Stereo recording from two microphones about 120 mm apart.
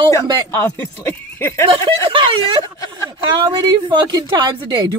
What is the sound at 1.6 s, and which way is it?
Speech, 45° right (ahead or behind).